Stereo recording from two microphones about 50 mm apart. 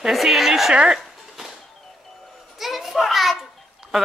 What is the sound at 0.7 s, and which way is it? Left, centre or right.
Speech, centre.